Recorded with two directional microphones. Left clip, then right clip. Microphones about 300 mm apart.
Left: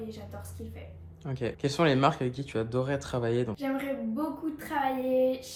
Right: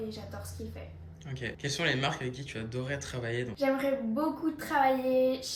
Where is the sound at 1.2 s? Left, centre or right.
Centre.